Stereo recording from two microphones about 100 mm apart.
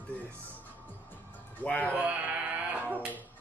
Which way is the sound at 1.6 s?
15° left (ahead or behind).